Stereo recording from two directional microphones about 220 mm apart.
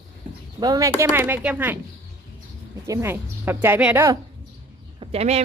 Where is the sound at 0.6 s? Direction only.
15° right (ahead or behind).